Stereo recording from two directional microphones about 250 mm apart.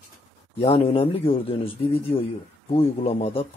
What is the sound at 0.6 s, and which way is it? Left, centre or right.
Speech, left.